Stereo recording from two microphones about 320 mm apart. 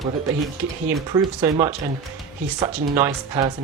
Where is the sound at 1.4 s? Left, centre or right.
Centre.